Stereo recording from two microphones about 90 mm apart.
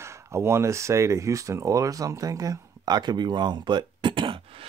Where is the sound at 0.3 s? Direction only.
30° right (ahead or behind); by 4.4 s 70° right (ahead or behind).